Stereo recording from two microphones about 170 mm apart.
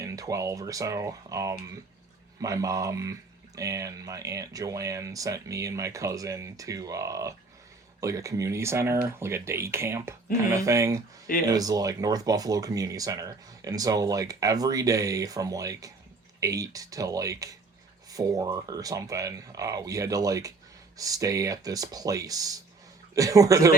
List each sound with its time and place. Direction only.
0.0 s speech: 20° right (ahead or behind)